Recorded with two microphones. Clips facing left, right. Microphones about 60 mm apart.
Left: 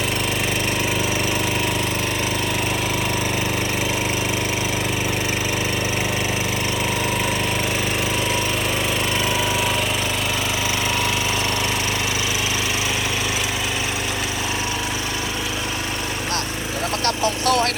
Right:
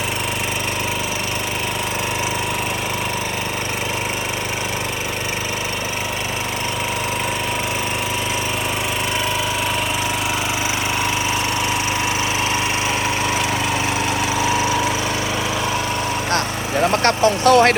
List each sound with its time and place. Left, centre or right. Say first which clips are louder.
17.0 s vehicle: right 6 dB; right